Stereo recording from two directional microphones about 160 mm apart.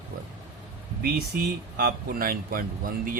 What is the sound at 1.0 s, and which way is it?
Speech, 75° right (ahead or behind).